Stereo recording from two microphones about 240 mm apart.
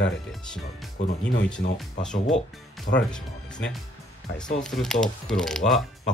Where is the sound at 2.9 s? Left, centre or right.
Left.